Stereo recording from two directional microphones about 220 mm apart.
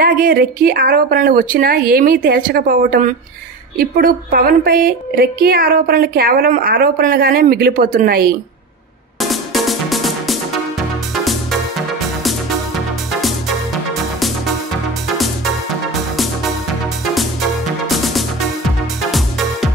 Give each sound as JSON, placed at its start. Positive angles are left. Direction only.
{"t": 0.0, "sound": "a woman's voice", "side_deg": -40}
{"t": 9.2, "sound": "music", "side_deg": 0}
{"t": 17.1, "sound": "music", "side_deg": 0}